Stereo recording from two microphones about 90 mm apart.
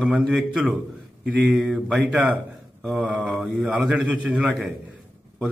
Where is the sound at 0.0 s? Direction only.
10° right (ahead or behind).